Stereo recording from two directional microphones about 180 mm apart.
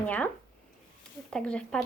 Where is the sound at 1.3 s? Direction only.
5° left (ahead or behind).